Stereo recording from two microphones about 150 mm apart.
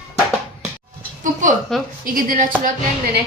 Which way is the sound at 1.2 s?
60° right (ahead or behind).